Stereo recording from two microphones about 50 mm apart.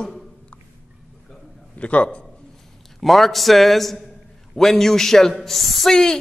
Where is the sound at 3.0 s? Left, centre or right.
Centre.